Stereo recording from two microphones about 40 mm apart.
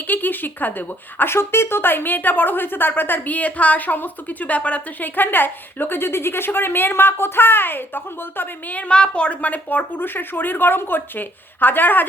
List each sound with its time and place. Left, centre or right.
0.1 s speech: left
1.3 s a woman's voice: left
3.2 s a woman's voice: left
5.0 s a woman's voice: left
8.9 s a woman's voice: left
9.4 s a woman's voice: left